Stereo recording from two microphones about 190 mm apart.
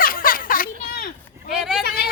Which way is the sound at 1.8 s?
55° left (ahead or behind).